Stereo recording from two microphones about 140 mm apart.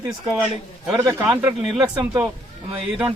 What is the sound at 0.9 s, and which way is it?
Speech, 25° right (ahead or behind).